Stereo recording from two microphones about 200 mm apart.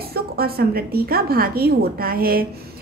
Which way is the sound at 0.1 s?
50° right (ahead or behind).